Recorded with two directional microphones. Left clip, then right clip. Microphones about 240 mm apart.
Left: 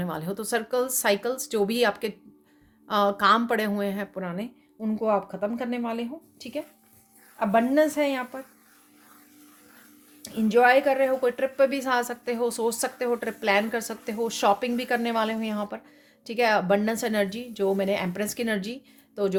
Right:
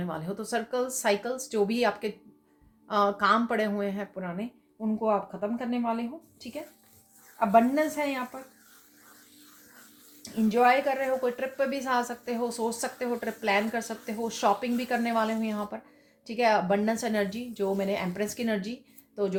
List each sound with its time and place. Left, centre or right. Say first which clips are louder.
0.0 s a woman's voice: left 3 dB; left
10.2 s a woman's voice: left 3 dB; left